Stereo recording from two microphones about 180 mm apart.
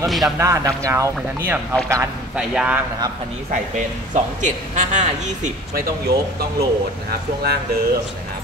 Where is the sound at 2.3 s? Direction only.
5° right (ahead or behind).